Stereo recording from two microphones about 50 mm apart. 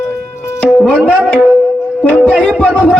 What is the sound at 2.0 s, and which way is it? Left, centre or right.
Music, left.